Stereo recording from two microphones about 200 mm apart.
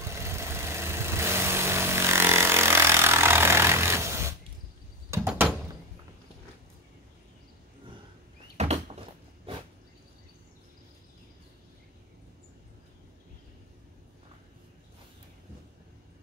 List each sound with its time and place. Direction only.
0.0 s vehicle: 15° right (ahead or behind)
5.1 s door: 15° right (ahead or behind)
8.5 s cupboard open or close: 35° right (ahead or behind)